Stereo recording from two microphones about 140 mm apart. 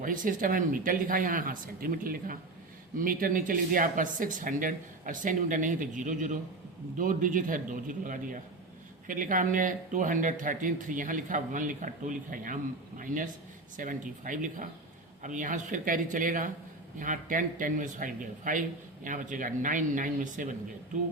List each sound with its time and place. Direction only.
0.0 s speech: 75° right (ahead or behind)